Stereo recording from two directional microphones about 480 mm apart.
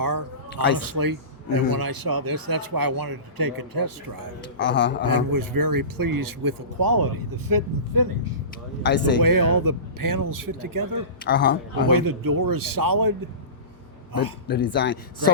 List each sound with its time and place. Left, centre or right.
0.0 s a sound: right
0.8 s a man's voice: right
4.5 s a man's voice: left
5.1 s a man's voice: right
8.8 s a man's voice: left
9.2 s a man's voice: right
11.2 s a man's voice: left
11.9 s a man's voice: right
14.4 s a man's voice: left